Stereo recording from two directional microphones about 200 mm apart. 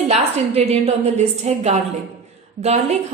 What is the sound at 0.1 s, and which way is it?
A woman's voice, 30° right (ahead or behind).